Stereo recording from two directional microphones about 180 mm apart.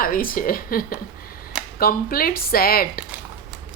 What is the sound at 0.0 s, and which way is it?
Speech, 55° left (ahead or behind).